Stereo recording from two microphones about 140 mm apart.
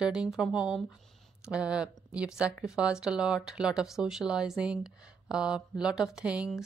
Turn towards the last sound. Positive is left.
turn(degrees=-5)  # may be behind; listen again after turning